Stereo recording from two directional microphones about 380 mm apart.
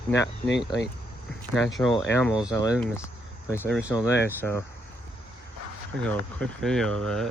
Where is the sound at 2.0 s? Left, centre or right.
Centre.